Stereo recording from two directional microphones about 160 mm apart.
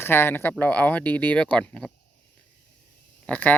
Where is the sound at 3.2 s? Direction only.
10° left (ahead or behind).